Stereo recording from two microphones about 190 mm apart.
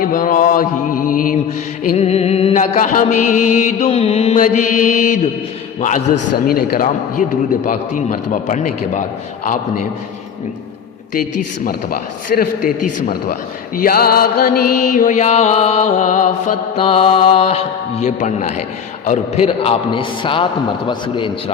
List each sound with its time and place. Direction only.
0.0 s a man's voice: 45° left (ahead or behind)
1.9 s mantra: 35° left (ahead or behind)
6.5 s mantra: 50° left (ahead or behind)
11.1 s a man's voice: 45° left (ahead or behind)
14.9 s mantra: 40° left (ahead or behind)
19.0 s a man's voice: 35° left (ahead or behind)